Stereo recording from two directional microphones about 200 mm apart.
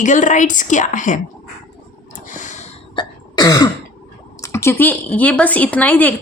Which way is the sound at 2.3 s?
40° left (ahead or behind).